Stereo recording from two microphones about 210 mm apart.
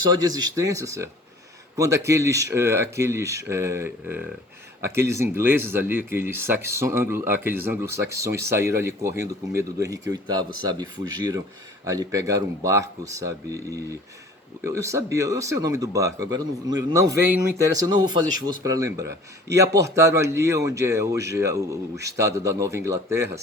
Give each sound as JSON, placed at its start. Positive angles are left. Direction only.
{"t": 0.3, "sound": "speech", "side_deg": -15}
{"t": 11.9, "sound": "speech", "side_deg": -15}